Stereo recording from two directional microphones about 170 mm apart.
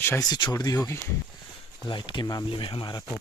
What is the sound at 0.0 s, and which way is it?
Speech, 20° left (ahead or behind).